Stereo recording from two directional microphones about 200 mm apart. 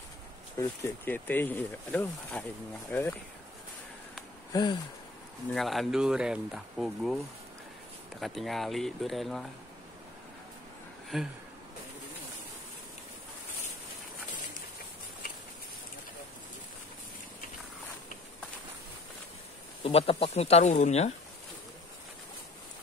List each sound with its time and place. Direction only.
0.6 s speech: 10° left (ahead or behind)
4.5 s a sound: 20° left (ahead or behind)
5.5 s speech: centre (ahead or behind)
8.2 s speech: centre (ahead or behind)
11.1 s speech: centre (ahead or behind)
19.8 s speech: 30° left (ahead or behind)